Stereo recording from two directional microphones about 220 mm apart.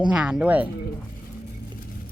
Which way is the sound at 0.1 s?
5° right (ahead or behind).